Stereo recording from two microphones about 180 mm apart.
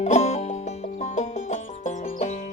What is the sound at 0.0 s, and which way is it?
Music, 40° left (ahead or behind).